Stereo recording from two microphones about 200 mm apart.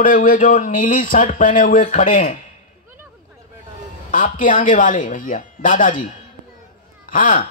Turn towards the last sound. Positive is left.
turn(degrees=40)  # may be behind; listen again after turning